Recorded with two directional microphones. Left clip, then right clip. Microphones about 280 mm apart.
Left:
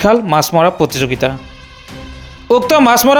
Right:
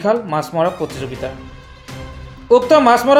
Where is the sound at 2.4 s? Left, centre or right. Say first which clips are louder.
Left 1 dB; left.